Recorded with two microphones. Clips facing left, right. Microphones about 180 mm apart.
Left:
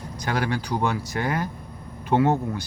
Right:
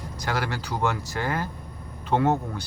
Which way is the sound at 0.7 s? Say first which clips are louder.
Right 2 dB; 15° left (ahead or behind).